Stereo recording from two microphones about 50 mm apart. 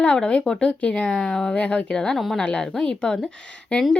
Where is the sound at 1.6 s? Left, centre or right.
Left.